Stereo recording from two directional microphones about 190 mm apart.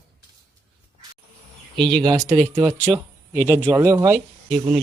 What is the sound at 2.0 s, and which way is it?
Speech, 20° right (ahead or behind).